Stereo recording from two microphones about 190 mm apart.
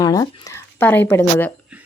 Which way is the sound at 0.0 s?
20° left (ahead or behind).